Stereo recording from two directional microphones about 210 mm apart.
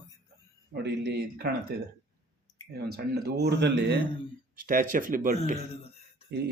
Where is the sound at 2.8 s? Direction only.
50° right (ahead or behind).